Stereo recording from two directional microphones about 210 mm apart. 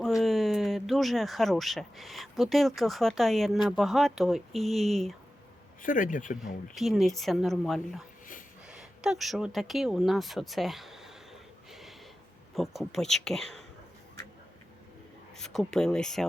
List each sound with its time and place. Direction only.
0.2 s speech: centre (ahead or behind)
5.8 s speech: 40° left (ahead or behind)
6.4 s speech: centre (ahead or behind)
11.7 s a sound: centre (ahead or behind)
12.5 s speech: centre (ahead or behind)
15.4 s speech: centre (ahead or behind)